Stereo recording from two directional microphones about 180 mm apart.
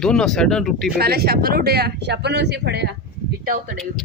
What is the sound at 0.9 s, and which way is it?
Speech, 60° right (ahead or behind).